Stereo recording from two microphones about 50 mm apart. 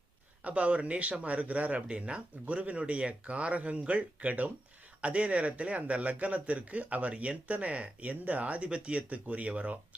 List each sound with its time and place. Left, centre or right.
0.4 s speech: right